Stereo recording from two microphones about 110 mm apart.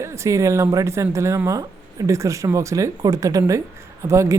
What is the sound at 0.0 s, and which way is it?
Speech, 25° right (ahead or behind).